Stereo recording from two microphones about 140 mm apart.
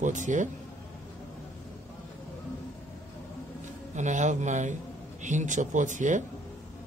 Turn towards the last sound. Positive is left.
turn(degrees=-65)  # may be behind; listen again after turning